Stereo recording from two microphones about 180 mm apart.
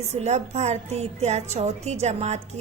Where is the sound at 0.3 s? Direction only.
40° right (ahead or behind).